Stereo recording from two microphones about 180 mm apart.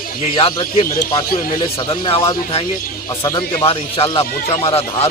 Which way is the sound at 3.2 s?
20° left (ahead or behind).